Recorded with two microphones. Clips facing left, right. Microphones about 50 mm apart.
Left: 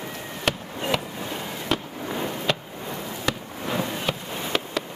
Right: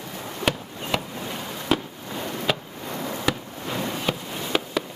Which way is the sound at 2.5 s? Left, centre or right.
Centre.